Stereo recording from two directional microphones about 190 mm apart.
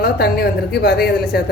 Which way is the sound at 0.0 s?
55° left (ahead or behind).